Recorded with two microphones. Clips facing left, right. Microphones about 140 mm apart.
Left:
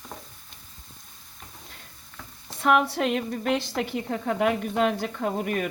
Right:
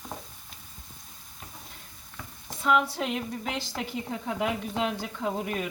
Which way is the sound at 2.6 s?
70° left (ahead or behind).